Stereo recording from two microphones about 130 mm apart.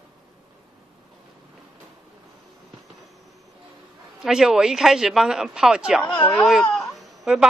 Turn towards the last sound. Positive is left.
turn(degrees=0)  # may be behind; listen again after turning